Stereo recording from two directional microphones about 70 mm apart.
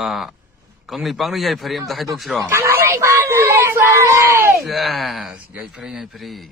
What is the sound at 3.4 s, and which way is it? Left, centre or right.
Speech, right.